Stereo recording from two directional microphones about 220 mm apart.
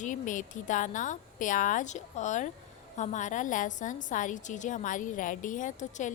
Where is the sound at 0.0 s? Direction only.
35° left (ahead or behind).